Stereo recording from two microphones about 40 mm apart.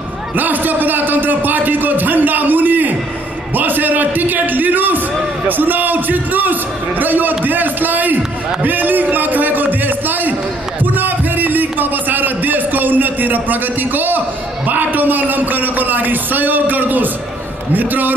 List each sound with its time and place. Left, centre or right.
0.4 s a man's voice: right
8.6 s a sound: right
14.7 s a man's voice: right